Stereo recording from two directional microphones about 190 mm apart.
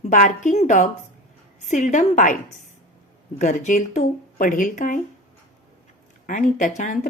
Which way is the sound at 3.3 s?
40° left (ahead or behind).